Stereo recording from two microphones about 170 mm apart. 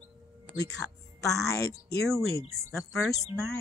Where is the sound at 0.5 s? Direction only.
20° left (ahead or behind).